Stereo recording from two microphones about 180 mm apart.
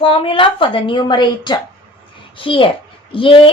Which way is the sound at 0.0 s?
30° left (ahead or behind).